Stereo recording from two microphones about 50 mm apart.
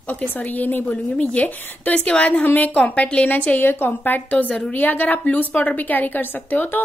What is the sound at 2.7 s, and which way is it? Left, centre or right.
Speech, left.